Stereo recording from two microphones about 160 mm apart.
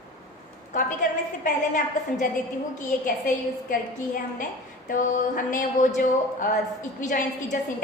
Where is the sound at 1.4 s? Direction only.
50° left (ahead or behind).